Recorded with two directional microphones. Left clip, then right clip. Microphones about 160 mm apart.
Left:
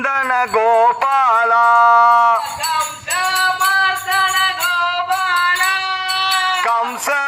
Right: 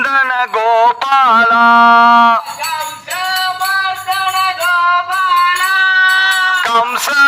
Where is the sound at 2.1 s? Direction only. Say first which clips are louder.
Right 4 dB; 40° right (ahead or behind).